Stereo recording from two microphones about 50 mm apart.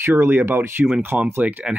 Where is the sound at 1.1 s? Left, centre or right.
Right.